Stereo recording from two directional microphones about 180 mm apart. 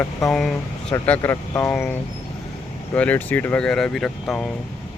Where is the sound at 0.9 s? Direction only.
15° left (ahead or behind).